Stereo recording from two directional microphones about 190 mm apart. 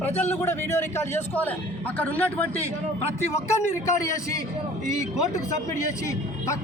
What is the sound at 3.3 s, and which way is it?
A man's voice, 15° left (ahead or behind).